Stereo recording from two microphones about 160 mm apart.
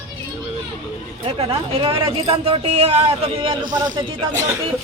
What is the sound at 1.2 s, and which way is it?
A man's voice, 40° right (ahead or behind).